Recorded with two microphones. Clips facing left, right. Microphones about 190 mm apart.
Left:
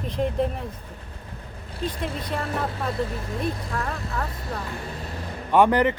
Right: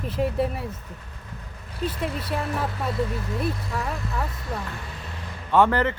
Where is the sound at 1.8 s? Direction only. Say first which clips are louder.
Right 1 dB; 5° right (ahead or behind).